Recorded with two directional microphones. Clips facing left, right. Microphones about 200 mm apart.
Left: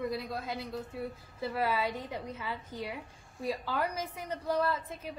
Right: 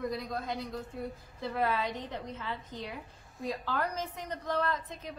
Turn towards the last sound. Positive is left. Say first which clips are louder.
# left 1 dB
turn(degrees=10)  # may be behind; listen again after turning